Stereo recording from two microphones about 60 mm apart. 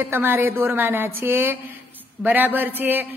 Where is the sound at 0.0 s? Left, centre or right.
Right.